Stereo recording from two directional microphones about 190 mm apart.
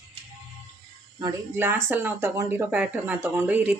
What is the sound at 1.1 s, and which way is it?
Speech, 15° right (ahead or behind).